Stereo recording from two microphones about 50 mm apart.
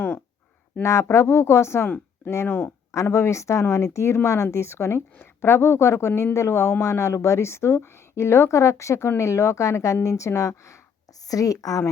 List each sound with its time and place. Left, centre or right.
0.8 s a woman's voice: left
2.9 s a woman's voice: left